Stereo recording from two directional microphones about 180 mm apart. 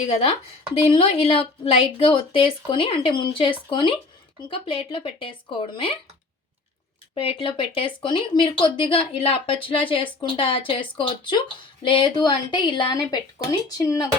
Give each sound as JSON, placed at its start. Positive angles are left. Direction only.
{"t": 0.1, "sound": "a woman's voice", "side_deg": 35}
{"t": 7.1, "sound": "speech", "side_deg": 30}